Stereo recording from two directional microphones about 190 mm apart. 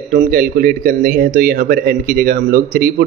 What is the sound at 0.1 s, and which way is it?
Speech, 50° right (ahead or behind).